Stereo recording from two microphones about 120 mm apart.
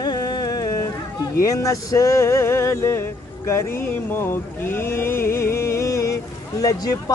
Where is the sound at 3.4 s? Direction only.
20° left (ahead or behind).